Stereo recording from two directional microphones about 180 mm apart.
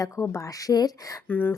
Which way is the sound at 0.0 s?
15° left (ahead or behind).